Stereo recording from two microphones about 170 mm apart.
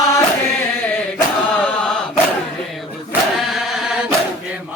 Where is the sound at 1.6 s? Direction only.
5° left (ahead or behind).